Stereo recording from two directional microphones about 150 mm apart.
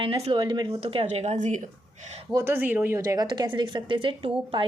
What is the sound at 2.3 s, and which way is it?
Speech, 20° right (ahead or behind).